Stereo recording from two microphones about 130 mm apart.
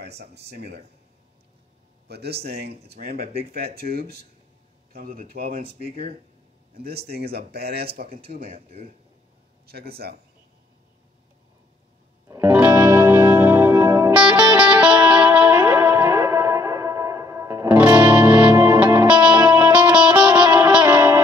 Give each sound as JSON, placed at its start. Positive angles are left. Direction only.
{"t": 5.0, "sound": "speech", "side_deg": -90}
{"t": 8.5, "sound": "speech", "side_deg": -50}
{"t": 12.3, "sound": "music", "side_deg": -20}
{"t": 14.6, "sound": "music", "side_deg": -10}
{"t": 19.0, "sound": "music", "side_deg": -10}